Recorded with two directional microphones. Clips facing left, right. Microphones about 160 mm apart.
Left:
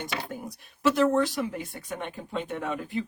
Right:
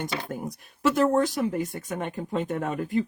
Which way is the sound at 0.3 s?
45° right (ahead or behind).